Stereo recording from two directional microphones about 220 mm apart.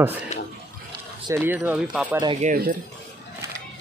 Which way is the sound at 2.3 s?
35° right (ahead or behind).